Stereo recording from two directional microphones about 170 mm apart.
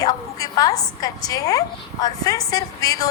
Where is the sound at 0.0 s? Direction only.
20° left (ahead or behind).